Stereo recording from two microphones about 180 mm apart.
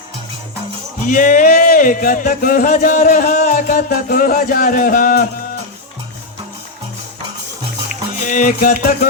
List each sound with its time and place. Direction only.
1.0 s speech: 45° left (ahead or behind)
8.2 s speech: 45° left (ahead or behind)